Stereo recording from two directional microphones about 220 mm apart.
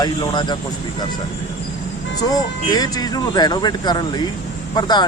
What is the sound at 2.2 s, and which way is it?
Speech, 20° left (ahead or behind).